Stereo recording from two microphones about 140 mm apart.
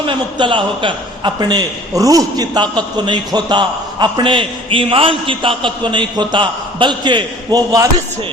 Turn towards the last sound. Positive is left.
turn(degrees=-30)  # may be behind; listen again after turning